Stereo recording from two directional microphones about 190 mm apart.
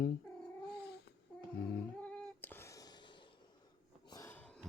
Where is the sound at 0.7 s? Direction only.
60° left (ahead or behind).